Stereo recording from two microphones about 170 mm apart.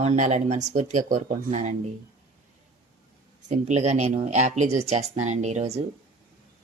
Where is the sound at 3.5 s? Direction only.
45° right (ahead or behind).